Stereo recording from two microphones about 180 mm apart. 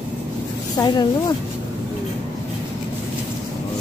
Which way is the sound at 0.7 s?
20° left (ahead or behind).